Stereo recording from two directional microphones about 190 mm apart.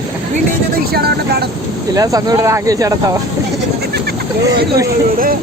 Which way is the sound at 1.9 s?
20° right (ahead or behind).